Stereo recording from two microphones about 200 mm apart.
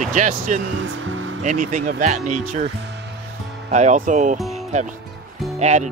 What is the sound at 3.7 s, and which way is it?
Speech, 40° right (ahead or behind).